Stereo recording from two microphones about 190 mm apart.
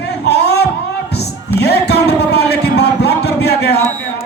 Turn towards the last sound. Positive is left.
turn(degrees=60)  # may be behind; listen again after turning